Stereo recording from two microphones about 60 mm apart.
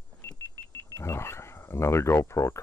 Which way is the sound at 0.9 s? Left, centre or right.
Left.